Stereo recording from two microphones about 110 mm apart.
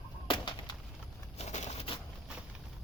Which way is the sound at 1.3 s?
85° left.